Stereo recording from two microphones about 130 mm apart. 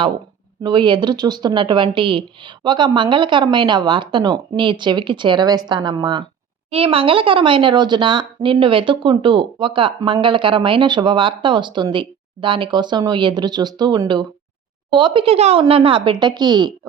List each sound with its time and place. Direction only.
0.6 s speech: 35° right (ahead or behind)
6.7 s speech: 45° right (ahead or behind)